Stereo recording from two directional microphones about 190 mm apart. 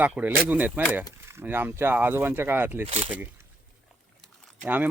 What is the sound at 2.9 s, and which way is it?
Speech, 30° right (ahead or behind).